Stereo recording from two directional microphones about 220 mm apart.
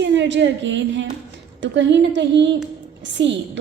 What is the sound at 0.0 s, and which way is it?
A woman's voice, 55° right (ahead or behind).